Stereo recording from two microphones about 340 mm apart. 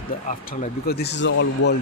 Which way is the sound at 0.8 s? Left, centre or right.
Left.